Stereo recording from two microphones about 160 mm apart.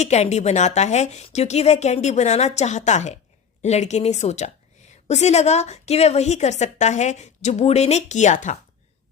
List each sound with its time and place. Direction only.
0.0 s a woman's voice: 45° left (ahead or behind)